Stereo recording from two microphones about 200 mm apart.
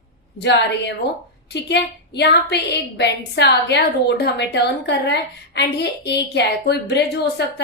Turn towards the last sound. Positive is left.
turn(degrees=55)  # may be behind; listen again after turning